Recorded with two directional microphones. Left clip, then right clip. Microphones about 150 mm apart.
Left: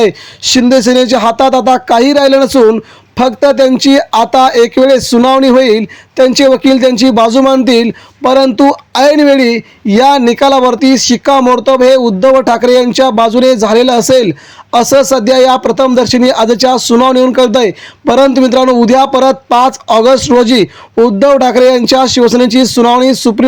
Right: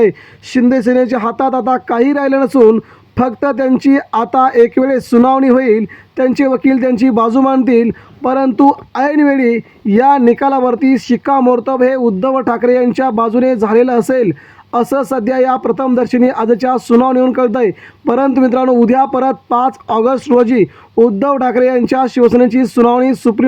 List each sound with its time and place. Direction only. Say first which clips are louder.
0.0 s speech: left 3 dB; 25° left (ahead or behind)